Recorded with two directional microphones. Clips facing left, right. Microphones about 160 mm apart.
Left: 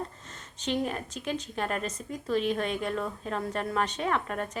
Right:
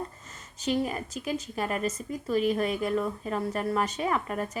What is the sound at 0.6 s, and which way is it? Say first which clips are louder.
Speech: right 2 dB; 5° right (ahead or behind).